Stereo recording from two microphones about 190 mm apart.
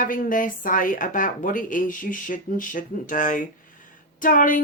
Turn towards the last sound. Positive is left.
turn(degrees=45)  # may be behind; listen again after turning